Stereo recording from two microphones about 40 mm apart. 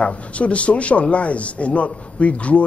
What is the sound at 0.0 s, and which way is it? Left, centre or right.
A woman's voice, left.